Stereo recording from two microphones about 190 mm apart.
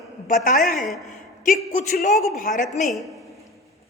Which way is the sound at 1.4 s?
40° left (ahead or behind).